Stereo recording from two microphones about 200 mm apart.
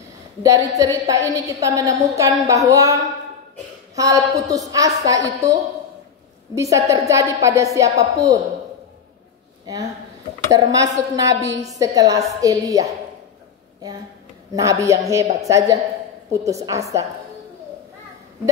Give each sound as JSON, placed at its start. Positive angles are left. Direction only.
{"t": 0.4, "sound": "a woman's voice", "side_deg": -15}
{"t": 10.5, "sound": "a woman's voice", "side_deg": -15}
{"t": 14.5, "sound": "a woman's voice", "side_deg": -15}